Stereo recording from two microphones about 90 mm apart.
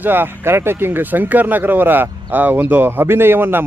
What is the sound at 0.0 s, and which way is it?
Speech, 25° right (ahead or behind).